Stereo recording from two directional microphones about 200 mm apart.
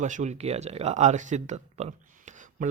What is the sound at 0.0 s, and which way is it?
Speech, 35° right (ahead or behind).